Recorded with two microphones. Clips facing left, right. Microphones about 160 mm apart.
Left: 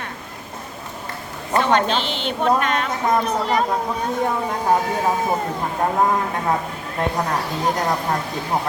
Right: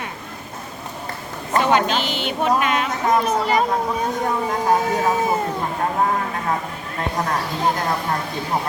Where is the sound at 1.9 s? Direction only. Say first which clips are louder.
Even; 5° right (ahead or behind).